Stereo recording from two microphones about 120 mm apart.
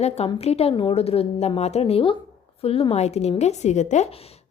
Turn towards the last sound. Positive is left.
turn(degrees=75)  # may be behind; listen again after turning